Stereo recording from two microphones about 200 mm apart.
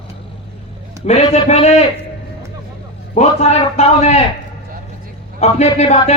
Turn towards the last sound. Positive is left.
turn(degrees=35)  # may be behind; listen again after turning